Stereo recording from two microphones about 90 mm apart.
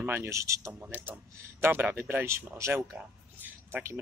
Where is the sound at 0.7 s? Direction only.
20° right (ahead or behind).